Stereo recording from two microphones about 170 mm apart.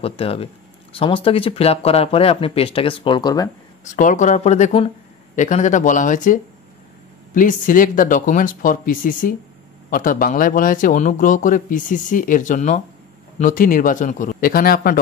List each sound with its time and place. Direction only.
0.0 s speech: 35° left (ahead or behind)
3.8 s a man's voice: 50° left (ahead or behind)